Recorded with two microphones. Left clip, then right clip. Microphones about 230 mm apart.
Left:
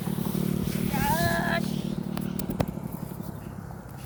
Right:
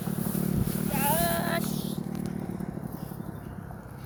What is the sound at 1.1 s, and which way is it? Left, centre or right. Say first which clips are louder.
Vehicle: left 2 dB; right.